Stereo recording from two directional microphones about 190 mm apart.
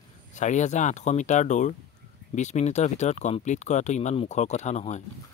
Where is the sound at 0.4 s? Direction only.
40° left (ahead or behind).